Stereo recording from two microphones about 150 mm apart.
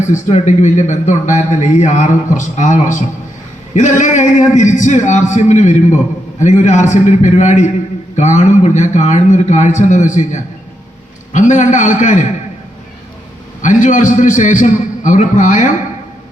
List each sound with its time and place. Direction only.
0.0 s a man's voice: 50° left (ahead or behind)
13.6 s a man's voice: 55° left (ahead or behind)